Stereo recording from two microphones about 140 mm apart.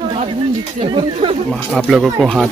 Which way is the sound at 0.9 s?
40° right (ahead or behind).